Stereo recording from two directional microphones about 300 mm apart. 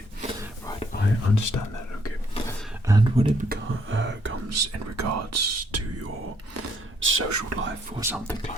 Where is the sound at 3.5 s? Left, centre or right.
Right.